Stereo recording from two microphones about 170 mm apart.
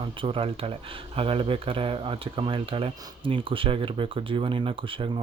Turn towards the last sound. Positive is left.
turn(degrees=-30)  # may be behind; listen again after turning